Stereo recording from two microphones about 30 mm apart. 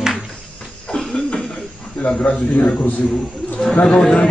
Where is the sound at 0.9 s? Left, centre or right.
Left.